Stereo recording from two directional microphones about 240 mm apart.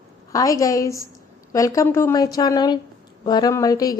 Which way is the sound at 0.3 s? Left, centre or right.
Centre.